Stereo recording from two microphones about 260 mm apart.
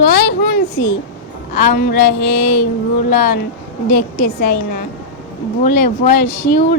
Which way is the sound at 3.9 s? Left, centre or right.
Left.